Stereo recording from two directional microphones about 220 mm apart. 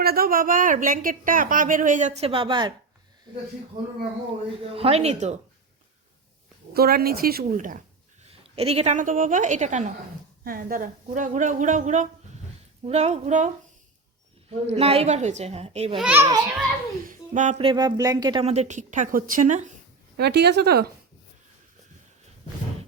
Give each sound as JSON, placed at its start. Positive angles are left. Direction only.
{"t": 0.0, "sound": "speech", "side_deg": -45}
{"t": 4.7, "sound": "a woman's voice", "side_deg": -25}
{"t": 6.7, "sound": "a woman's voice", "side_deg": -45}
{"t": 14.5, "sound": "a woman's voice", "side_deg": -25}
{"t": 16.0, "sound": "a child's voice", "side_deg": -5}
{"t": 17.1, "sound": "speech", "side_deg": -35}
{"t": 20.1, "sound": "speech", "side_deg": -50}